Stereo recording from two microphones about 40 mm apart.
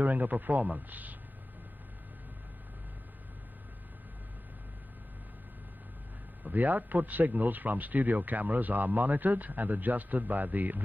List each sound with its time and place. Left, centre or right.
0.0 s speech: right
6.4 s speech: right